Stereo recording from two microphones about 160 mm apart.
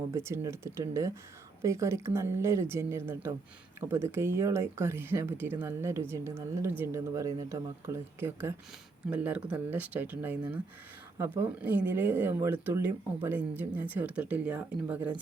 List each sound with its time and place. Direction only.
0.1 s speech: 15° right (ahead or behind)